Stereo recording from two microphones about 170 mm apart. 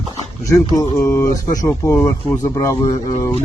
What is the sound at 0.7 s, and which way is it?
Speech, 15° left (ahead or behind).